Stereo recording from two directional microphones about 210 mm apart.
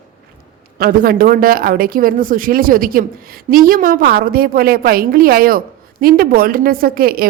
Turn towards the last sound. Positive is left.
turn(degrees=-45)  # may be behind; listen again after turning